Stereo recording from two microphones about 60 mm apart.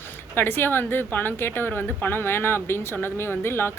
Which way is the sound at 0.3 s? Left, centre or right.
Left.